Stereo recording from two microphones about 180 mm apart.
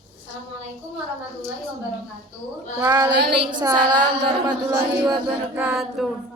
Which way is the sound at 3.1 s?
65° right (ahead or behind).